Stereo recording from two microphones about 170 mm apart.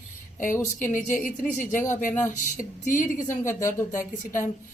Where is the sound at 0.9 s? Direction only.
50° left (ahead or behind).